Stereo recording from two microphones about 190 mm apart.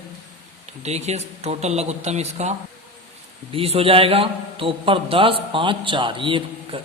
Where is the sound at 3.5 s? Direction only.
30° right (ahead or behind).